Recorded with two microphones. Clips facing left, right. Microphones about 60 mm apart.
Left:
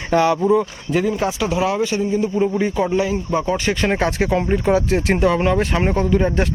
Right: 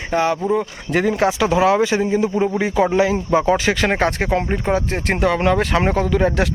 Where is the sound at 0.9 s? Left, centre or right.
Right.